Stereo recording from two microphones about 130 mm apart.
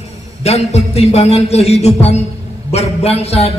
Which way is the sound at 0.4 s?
55° left (ahead or behind).